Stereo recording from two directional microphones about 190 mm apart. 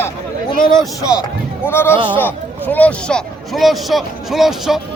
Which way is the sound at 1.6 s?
10° left (ahead or behind).